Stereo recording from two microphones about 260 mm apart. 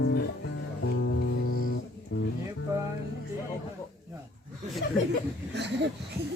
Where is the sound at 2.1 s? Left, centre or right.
Left.